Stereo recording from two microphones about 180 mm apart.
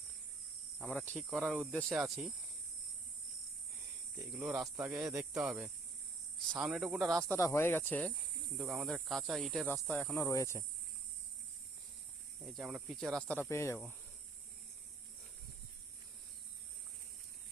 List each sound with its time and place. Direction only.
1.3 s speech: centre (ahead or behind)
1.5 s cricket: 5° right (ahead or behind)
1.8 s speech: centre (ahead or behind)
4.3 s cricket: 10° right (ahead or behind)
6.5 s speech: centre (ahead or behind)
7.3 s speech: 15° left (ahead or behind)
8.5 s speech: centre (ahead or behind)
9.6 s speech: 10° left (ahead or behind)
12.5 s speech: centre (ahead or behind); by 13.7 s 15° left (ahead or behind)